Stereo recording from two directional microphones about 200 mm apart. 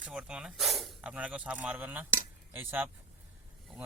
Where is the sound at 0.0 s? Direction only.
5° right (ahead or behind).